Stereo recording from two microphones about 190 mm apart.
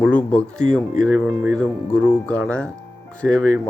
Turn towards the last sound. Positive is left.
turn(degrees=5)  # may be behind; listen again after turning